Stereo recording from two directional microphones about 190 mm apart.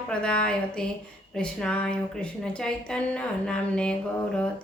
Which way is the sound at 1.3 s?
5° left (ahead or behind).